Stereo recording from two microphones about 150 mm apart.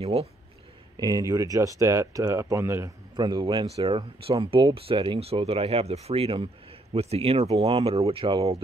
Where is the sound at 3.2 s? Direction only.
30° right (ahead or behind).